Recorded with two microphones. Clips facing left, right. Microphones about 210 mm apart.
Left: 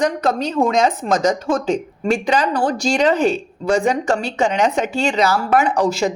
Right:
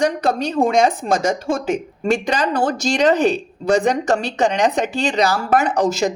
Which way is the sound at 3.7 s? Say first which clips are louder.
Right 1 dB; 20° right (ahead or behind).